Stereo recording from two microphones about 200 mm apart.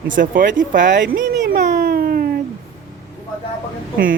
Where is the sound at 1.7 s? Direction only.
50° right (ahead or behind).